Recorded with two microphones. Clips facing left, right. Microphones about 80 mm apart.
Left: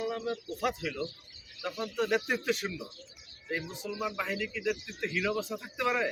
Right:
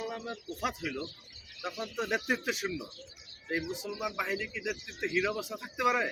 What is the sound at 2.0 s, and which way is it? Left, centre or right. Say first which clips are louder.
A man's voice: left 2 dB; centre.